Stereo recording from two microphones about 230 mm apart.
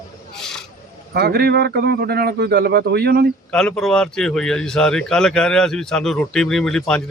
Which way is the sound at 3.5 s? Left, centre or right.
Centre.